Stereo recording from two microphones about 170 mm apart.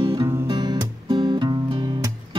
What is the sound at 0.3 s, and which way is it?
Music, 25° right (ahead or behind).